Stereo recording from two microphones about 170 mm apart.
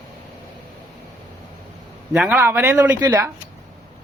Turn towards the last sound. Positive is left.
turn(degrees=-20)  # may be behind; listen again after turning